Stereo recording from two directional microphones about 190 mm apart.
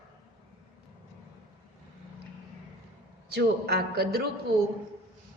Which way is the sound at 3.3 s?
55° right (ahead or behind).